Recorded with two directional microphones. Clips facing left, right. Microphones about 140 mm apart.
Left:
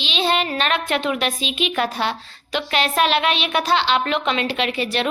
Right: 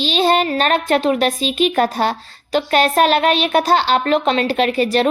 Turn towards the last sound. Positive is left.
turn(degrees=-40)  # may be behind; listen again after turning